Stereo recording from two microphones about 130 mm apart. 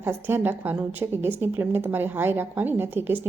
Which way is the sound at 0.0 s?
20° right (ahead or behind).